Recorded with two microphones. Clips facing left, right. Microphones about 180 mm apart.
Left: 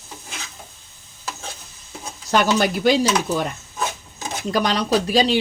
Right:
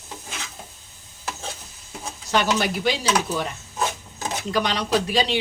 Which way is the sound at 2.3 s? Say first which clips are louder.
Left 4 dB; 45° left (ahead or behind).